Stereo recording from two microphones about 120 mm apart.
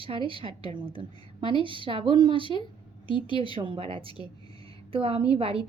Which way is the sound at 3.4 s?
45° right (ahead or behind).